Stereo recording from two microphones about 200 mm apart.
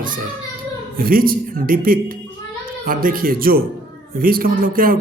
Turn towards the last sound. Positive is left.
turn(degrees=-45)  # may be behind; listen again after turning